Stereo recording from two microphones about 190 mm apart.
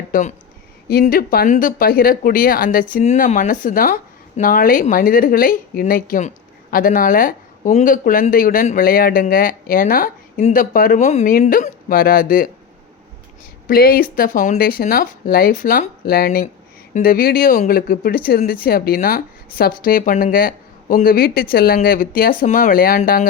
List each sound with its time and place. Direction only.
0.1 s speech: 40° left (ahead or behind)
11.3 s speech: 50° left (ahead or behind)
13.7 s speech: 50° left (ahead or behind)